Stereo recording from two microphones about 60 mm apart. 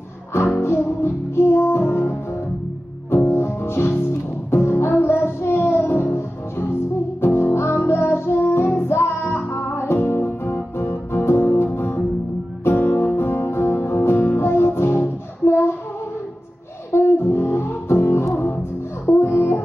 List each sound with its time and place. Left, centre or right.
0.6 s music: left
5.2 s child singing: left
6.1 s music: left
16.9 s music: left